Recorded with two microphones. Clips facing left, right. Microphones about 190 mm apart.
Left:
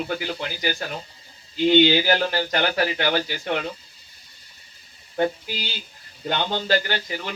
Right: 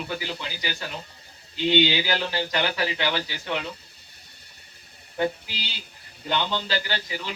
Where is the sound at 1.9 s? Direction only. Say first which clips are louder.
Left 6 dB; 50° left (ahead or behind).